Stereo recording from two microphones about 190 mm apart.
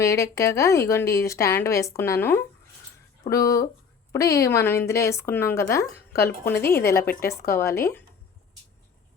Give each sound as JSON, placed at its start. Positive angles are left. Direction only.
{"t": 0.0, "sound": "speech", "side_deg": 15}
{"t": 6.7, "sound": "a woman's voice", "side_deg": 55}
{"t": 7.6, "sound": "speech", "side_deg": 15}